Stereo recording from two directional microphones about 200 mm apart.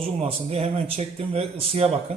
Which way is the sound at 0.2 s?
30° right (ahead or behind).